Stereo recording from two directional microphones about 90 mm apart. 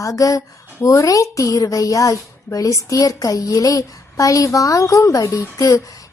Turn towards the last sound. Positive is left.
turn(degrees=40)  # may be behind; listen again after turning